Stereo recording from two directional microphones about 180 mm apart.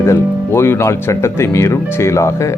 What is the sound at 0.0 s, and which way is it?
Speech, 15° left (ahead or behind).